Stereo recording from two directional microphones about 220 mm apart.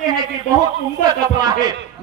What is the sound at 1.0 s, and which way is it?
Speech, 20° right (ahead or behind).